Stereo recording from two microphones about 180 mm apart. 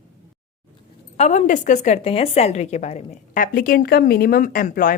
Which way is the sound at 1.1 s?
40° left (ahead or behind).